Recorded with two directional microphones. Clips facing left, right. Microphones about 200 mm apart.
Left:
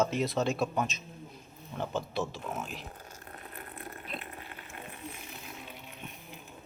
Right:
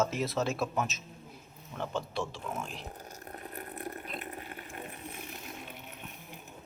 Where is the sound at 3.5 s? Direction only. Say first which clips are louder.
Right 5 dB; 40° right (ahead or behind).